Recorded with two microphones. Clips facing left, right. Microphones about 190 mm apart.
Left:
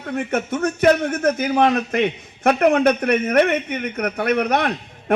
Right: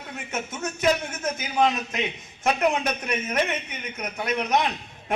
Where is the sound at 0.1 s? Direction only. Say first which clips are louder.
Left 11 dB; 60° left (ahead or behind).